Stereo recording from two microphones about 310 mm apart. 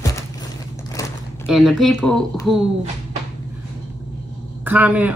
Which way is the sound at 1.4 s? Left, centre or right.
Centre.